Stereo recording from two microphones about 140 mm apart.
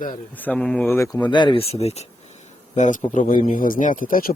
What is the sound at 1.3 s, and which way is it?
Speech, 35° left (ahead or behind).